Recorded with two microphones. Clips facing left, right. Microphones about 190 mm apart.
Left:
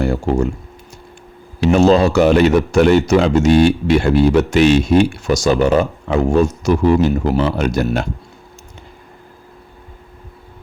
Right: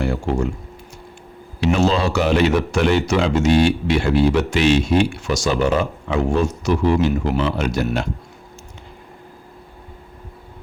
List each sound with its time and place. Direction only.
0.0 s speech: 40° left (ahead or behind)
1.6 s speech: 45° left (ahead or behind)